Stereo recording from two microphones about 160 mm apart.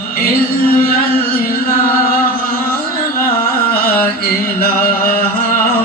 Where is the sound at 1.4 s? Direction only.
70° left (ahead or behind).